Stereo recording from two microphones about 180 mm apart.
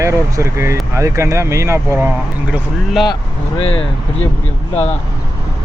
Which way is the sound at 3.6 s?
30° left (ahead or behind).